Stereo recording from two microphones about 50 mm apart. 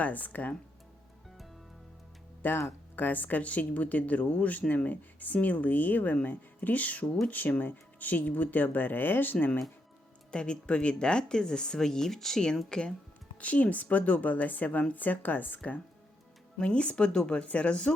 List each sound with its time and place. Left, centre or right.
0.0 s speech: left
2.4 s speech: left
10.3 s speech: centre
13.4 s speech: left
16.6 s speech: left